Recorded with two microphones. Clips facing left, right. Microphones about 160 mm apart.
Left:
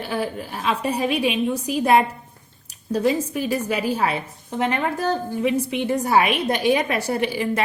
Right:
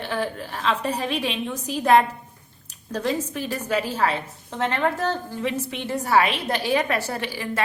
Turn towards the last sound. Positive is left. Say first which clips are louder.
# left 6 dB
turn(degrees=15)  # may be behind; listen again after turning